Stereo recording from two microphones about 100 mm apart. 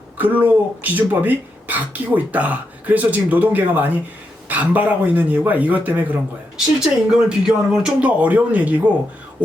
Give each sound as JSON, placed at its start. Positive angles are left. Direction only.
{"t": 0.2, "sound": "speech", "side_deg": -15}